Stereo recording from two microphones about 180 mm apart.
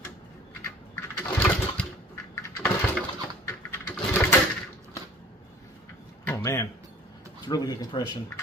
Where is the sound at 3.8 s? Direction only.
10° left (ahead or behind).